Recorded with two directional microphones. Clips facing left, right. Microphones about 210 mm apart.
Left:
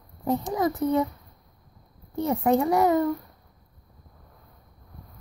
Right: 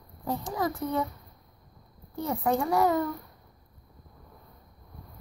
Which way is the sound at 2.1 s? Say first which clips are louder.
Left 5 dB; 20° left (ahead or behind).